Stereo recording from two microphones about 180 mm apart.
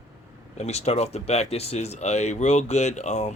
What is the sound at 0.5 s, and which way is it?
Speech, 35° left (ahead or behind).